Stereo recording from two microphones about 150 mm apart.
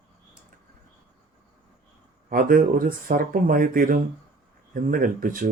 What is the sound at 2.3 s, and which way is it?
Speech, 70° right (ahead or behind).